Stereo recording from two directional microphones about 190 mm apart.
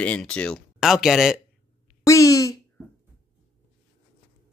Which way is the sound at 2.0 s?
15° left (ahead or behind).